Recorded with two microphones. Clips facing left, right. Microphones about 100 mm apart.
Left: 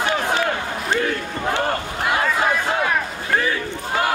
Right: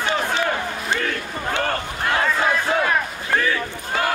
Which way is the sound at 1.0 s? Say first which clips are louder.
Left 3 dB; 20° left (ahead or behind).